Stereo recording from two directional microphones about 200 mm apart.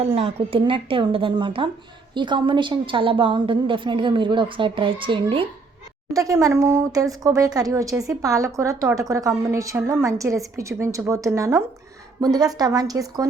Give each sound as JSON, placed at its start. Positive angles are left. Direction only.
{"t": 0.0, "sound": "a woman's voice", "side_deg": -30}